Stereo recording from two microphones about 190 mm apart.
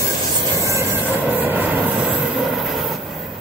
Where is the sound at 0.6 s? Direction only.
15° right (ahead or behind).